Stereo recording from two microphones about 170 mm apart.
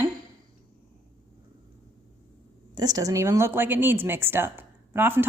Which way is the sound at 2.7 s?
20° right (ahead or behind).